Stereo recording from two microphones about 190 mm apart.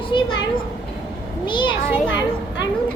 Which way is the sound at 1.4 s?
25° left (ahead or behind).